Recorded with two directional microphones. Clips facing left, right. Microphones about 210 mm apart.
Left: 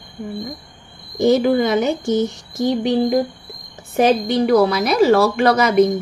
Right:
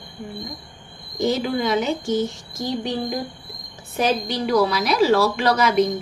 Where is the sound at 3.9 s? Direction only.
55° left (ahead or behind).